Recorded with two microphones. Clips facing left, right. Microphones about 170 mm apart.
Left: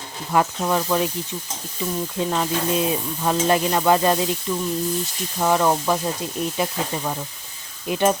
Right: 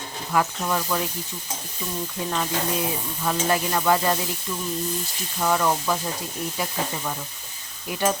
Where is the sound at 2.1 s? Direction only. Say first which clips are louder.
Left 4 dB; 20° left (ahead or behind).